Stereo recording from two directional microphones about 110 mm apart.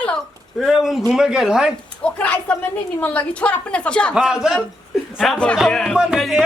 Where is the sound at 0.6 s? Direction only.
Centre (ahead or behind).